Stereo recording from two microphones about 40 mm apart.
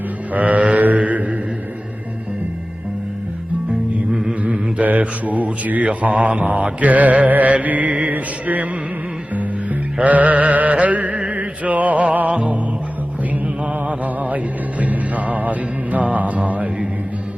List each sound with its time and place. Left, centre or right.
0.3 s mantra: right
4.1 s a sound: centre
4.4 s mantra: right
6.8 s music: right
10.0 s chant: right
11.3 s music: right
13.8 s music: right